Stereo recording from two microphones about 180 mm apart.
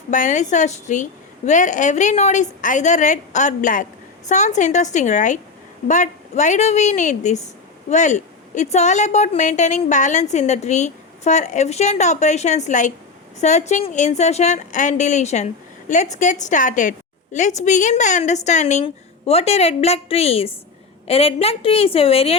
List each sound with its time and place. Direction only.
0.1 s a woman's voice: 45° left (ahead or behind)